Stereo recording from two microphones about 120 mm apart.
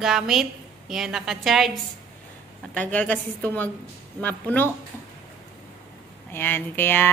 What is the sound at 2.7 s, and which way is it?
A woman's voice, 10° left (ahead or behind).